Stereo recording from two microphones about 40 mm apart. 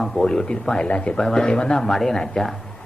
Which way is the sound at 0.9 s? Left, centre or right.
Left.